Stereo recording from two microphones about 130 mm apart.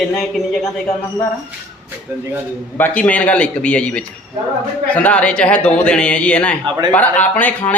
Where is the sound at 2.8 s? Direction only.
10° left (ahead or behind).